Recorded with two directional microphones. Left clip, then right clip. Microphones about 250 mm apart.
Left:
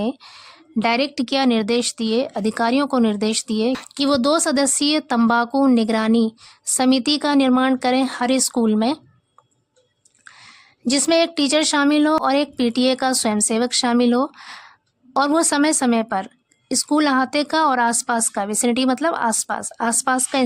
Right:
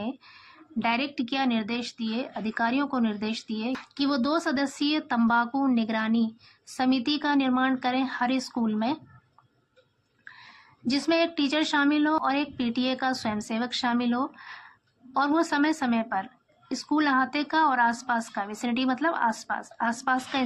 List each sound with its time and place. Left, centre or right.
0.0 s speech: left
10.2 s speech: left